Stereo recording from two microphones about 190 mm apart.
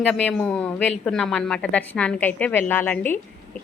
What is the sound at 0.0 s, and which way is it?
Speech, 5° left (ahead or behind).